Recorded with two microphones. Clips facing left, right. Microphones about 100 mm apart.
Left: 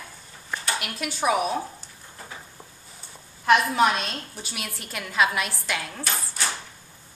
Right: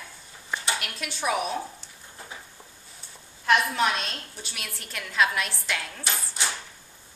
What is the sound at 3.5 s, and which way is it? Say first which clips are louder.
A woman's voice: left 4 dB; 5° left (ahead or behind).